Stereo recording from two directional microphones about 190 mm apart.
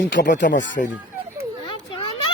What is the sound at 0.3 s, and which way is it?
Speech, 65° left (ahead or behind).